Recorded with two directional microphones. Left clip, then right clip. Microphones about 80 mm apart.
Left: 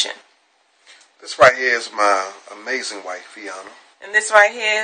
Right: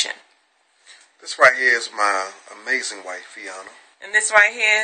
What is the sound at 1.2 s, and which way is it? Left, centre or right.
Speech, centre.